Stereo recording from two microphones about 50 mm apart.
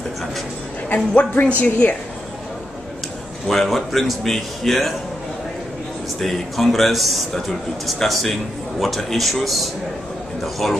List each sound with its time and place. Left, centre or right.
0.8 s a woman's voice: left
3.4 s a man's voice: centre
6.1 s a man's voice: centre